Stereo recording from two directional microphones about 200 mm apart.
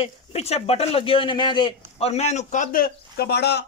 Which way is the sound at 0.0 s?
30° left (ahead or behind).